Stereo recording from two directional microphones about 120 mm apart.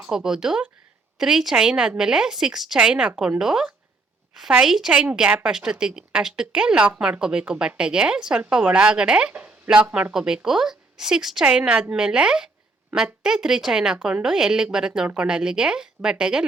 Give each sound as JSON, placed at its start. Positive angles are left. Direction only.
{"t": 0.0, "sound": "a woman's voice", "side_deg": -5}